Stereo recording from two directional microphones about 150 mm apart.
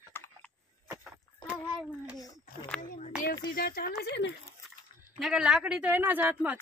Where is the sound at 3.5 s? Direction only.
85° left.